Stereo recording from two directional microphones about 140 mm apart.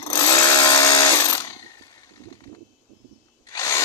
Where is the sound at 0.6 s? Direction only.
25° left (ahead or behind).